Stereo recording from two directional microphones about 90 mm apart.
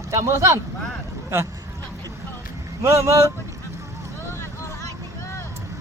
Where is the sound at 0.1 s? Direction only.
35° right (ahead or behind).